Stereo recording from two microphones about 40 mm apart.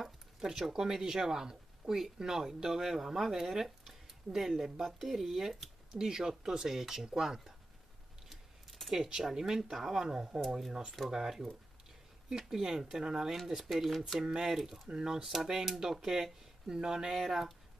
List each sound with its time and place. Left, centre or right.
0.0 s speech: centre
6.0 s speech: centre
8.3 s a sound: centre
9.1 s speech: centre
10.0 s speech: centre
10.4 s speech: centre
11.1 s speech: centre
13.7 s speech: centre
14.9 s speech: centre
15.6 s speech: centre
16.6 s speech: centre